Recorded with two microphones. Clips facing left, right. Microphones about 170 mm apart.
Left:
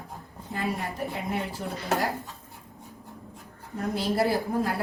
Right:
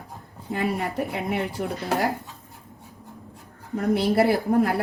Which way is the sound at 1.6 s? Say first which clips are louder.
Right 6 dB; 65° right (ahead or behind).